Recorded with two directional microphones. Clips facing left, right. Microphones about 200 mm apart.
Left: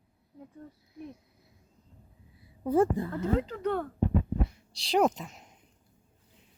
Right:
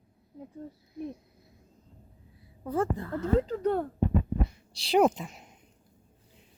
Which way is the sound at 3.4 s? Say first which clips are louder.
Right 3 dB; 35° right (ahead or behind).